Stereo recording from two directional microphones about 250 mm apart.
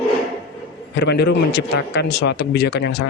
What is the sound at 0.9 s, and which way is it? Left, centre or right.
A man's voice, left.